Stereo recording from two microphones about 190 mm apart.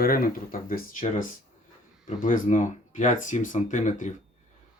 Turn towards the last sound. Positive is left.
turn(degrees=40)  # may be behind; listen again after turning